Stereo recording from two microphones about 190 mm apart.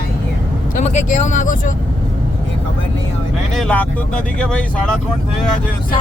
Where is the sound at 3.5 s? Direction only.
5° left (ahead or behind).